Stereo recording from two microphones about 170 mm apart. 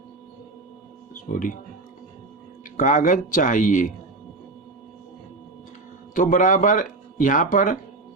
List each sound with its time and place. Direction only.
1.3 s speech: 55° left (ahead or behind)
2.7 s speech: 45° left (ahead or behind)
6.1 s speech: 50° left (ahead or behind)